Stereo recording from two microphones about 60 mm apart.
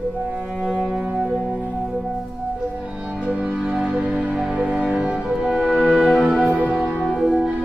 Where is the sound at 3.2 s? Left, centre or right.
Centre.